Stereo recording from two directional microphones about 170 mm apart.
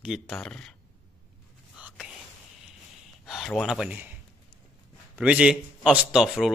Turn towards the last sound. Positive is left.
turn(degrees=-5)  # may be behind; listen again after turning